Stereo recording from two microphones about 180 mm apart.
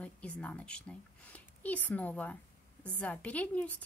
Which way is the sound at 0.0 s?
5° left (ahead or behind).